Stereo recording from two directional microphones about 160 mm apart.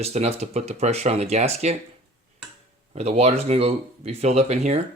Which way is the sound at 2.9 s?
40° right (ahead or behind).